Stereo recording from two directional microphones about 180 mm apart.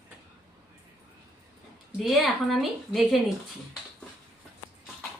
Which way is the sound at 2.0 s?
Centre (ahead or behind).